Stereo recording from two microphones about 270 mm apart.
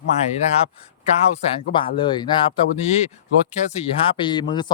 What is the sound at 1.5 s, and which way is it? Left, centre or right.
Speech, centre.